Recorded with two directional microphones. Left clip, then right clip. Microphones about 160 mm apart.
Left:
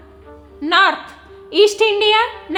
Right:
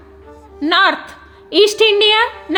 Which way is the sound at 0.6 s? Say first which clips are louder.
Right 1 dB; 25° right (ahead or behind).